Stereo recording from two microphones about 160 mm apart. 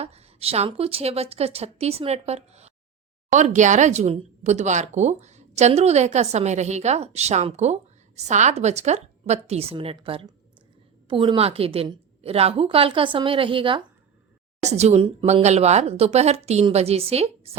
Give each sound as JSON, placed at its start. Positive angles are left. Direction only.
{"t": 0.0, "sound": "a woman's voice", "side_deg": -40}
{"t": 14.6, "sound": "a woman's voice", "side_deg": -45}